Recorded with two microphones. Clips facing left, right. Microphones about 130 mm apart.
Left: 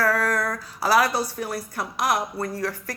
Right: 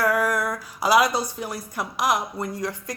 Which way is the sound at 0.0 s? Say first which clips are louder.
Right 1 dB; 15° right (ahead or behind).